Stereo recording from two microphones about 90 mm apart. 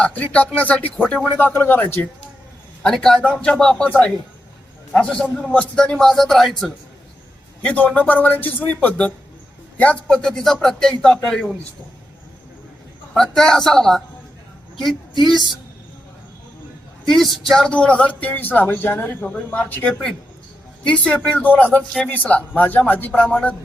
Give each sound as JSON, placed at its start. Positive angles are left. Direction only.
{"t": 0.0, "sound": "speech", "side_deg": 15}
{"t": 2.8, "sound": "a man's voice", "side_deg": 5}
{"t": 7.6, "sound": "speech", "side_deg": 15}
{"t": 13.1, "sound": "a man's voice", "side_deg": 5}
{"t": 15.2, "sound": "a man's voice", "side_deg": 0}
{"t": 17.1, "sound": "speech", "side_deg": 0}